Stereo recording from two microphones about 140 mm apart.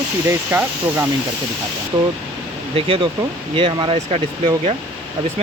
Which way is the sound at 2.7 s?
40° right (ahead or behind).